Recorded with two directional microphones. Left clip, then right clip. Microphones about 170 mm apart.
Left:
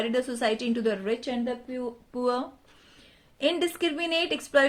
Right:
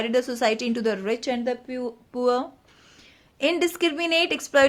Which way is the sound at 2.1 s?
20° right (ahead or behind).